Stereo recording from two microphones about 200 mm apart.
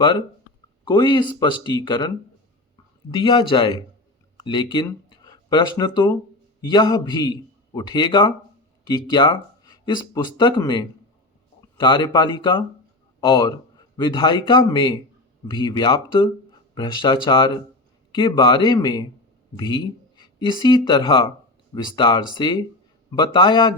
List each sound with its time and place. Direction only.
0.9 s a man's voice: 20° left (ahead or behind)